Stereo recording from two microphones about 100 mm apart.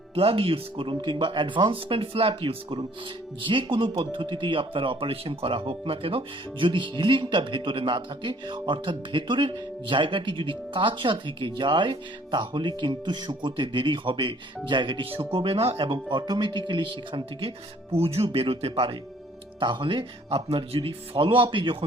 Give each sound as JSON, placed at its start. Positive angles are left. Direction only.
{"t": 0.1, "sound": "speech", "side_deg": -70}
{"t": 17.9, "sound": "speech", "side_deg": -85}
{"t": 19.5, "sound": "speech", "side_deg": -55}